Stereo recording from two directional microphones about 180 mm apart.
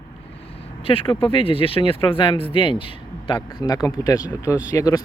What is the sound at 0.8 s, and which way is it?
Speech, 30° left (ahead or behind).